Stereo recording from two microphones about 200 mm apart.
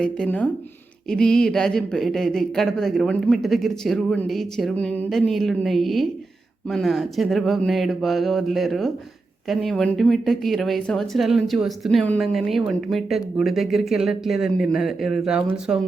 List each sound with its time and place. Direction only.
0.0 s a woman's voice: 5° left (ahead or behind)